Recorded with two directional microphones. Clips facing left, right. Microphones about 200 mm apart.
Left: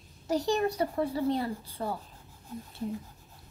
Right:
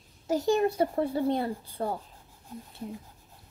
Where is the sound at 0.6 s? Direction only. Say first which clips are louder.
Right 3 dB; 30° right (ahead or behind).